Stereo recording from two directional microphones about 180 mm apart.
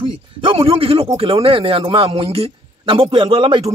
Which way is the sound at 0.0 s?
30° right (ahead or behind).